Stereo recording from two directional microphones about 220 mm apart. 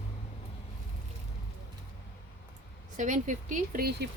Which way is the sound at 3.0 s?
35° right (ahead or behind).